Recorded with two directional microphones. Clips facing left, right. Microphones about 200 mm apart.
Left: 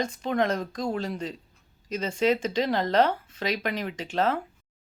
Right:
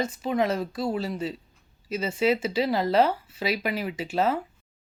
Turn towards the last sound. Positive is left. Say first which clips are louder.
# right 1 dB
turn(degrees=-10)  # may be behind; listen again after turning